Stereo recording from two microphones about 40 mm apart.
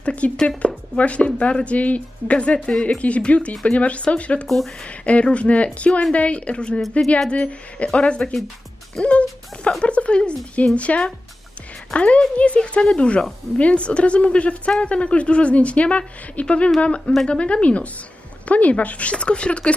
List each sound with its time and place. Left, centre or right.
0.0 s a sound: left
0.9 s speech: left
4.4 s speech: centre
5.2 s speech: left